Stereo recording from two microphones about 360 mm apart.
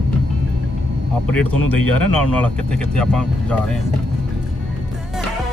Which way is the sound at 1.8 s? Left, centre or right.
Left.